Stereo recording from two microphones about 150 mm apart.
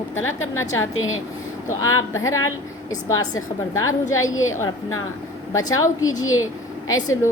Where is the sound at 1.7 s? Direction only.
20° left (ahead or behind).